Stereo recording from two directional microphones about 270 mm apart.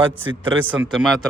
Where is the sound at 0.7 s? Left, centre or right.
Centre.